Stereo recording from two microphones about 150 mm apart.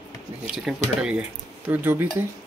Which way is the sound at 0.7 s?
5° right (ahead or behind).